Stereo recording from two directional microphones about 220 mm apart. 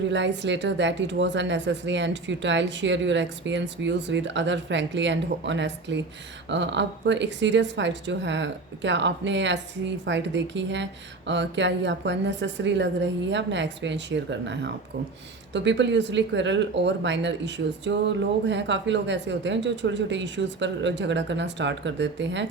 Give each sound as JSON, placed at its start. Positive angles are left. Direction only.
{"t": 0.1, "sound": "speech", "side_deg": -55}